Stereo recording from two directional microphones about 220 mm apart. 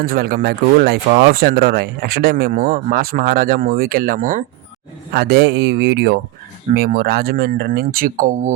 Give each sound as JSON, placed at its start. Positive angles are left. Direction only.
{"t": 0.0, "sound": "speech", "side_deg": -40}
{"t": 5.1, "sound": "speech", "side_deg": -45}